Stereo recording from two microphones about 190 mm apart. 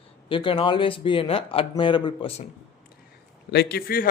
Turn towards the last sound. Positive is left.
turn(degrees=55)  # may be behind; listen again after turning